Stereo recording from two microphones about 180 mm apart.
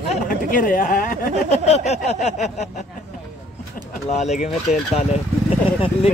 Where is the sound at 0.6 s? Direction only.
50° left (ahead or behind).